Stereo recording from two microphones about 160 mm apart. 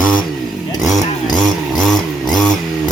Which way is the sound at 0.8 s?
Centre (ahead or behind).